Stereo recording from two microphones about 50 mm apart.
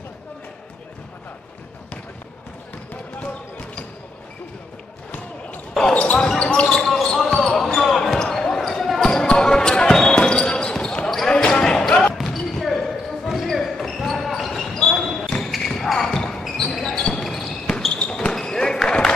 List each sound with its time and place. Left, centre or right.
2.9 s basketball bounce: left
5.1 s basketball bounce: left
5.9 s basketball bounce: left
12.2 s basketball bounce: centre
16.9 s basketball bounce: centre
17.2 s basketball bounce: centre
17.5 s basketball bounce: left